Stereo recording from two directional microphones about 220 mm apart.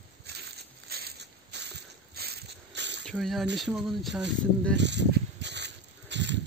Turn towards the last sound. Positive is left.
turn(degrees=-55)  # may be behind; listen again after turning